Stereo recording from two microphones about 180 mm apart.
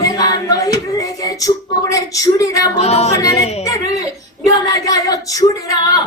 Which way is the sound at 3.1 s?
20° left (ahead or behind).